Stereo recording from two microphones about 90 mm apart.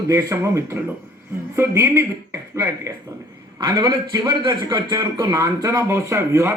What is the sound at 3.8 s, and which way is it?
Speech, 55° right (ahead or behind).